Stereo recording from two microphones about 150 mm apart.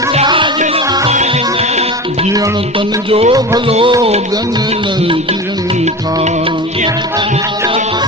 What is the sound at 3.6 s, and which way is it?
Music, 35° right (ahead or behind).